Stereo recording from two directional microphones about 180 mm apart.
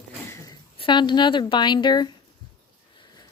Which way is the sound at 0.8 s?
25° left (ahead or behind).